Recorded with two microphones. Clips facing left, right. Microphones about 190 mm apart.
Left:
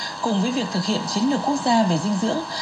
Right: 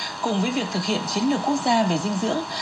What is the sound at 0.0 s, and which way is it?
Speech, centre (ahead or behind).